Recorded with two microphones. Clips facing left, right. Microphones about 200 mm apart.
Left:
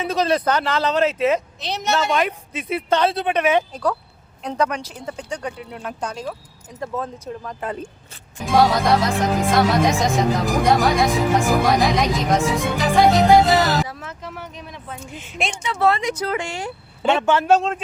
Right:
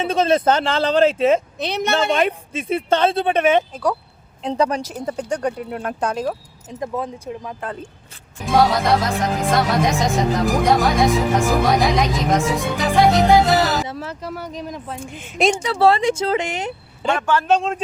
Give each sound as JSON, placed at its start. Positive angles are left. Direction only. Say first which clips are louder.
{"t": 0.0, "sound": "a woman's voice", "louder": "right 3 dB", "side_deg": -25}
{"t": 1.5, "sound": "a woman's voice", "louder": "right 2 dB", "side_deg": -60}
{"t": 2.0, "sound": "a woman's voice", "louder": "right 2 dB", "side_deg": -30}
{"t": 4.8, "sound": "speech", "louder": "right 6 dB", "side_deg": -45}
{"t": 6.7, "sound": "speech", "louder": "right 2 dB", "side_deg": -15}
{"t": 7.6, "sound": "speech", "louder": "left 2 dB", "side_deg": 10}
{"t": 8.4, "sound": "speech", "louder": "even", "side_deg": 0}
{"t": 13.8, "sound": "speech", "louder": "right 5 dB", "side_deg": -30}
{"t": 15.0, "sound": "speech", "louder": "right 9 dB", "side_deg": -45}
{"t": 15.6, "sound": "a woman's voice", "louder": "right 1 dB", "side_deg": -30}
{"t": 17.2, "sound": "a man's voice", "louder": "left 1 dB", "side_deg": 20}